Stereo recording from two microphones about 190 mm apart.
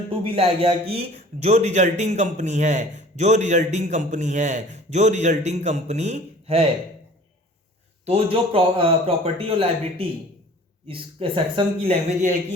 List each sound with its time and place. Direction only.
0.1 s a man's voice: 30° right (ahead or behind)
8.0 s a man's voice: 30° right (ahead or behind)